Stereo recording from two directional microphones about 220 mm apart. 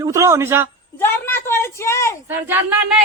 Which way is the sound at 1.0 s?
10° left (ahead or behind).